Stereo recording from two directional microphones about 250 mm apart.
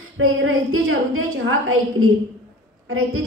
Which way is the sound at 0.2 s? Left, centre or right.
Right.